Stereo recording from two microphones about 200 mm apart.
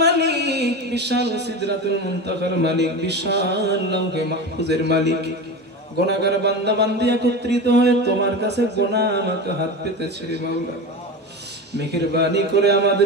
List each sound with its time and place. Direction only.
0.0 s a sound: 55° right (ahead or behind)
2.2 s mantra: 55° right (ahead or behind)
11.7 s mantra: 55° right (ahead or behind)